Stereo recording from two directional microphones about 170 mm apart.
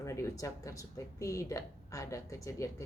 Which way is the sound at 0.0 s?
15° left (ahead or behind).